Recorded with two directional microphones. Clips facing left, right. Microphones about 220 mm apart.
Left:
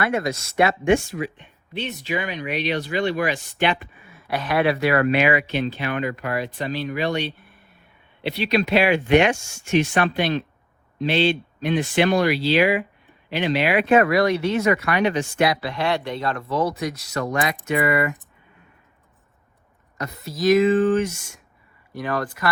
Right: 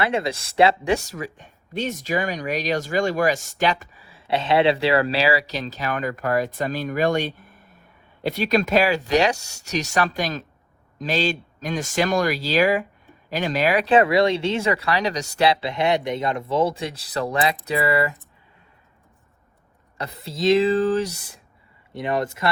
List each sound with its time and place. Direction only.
0.0 s speech: 30° right (ahead or behind)
1.0 s speech: 45° right (ahead or behind)
20.0 s speech: 30° right (ahead or behind)
21.9 s speech: 25° right (ahead or behind)